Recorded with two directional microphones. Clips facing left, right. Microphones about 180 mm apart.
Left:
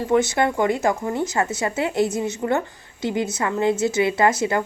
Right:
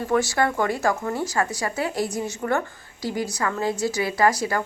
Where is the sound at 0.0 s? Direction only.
20° left (ahead or behind).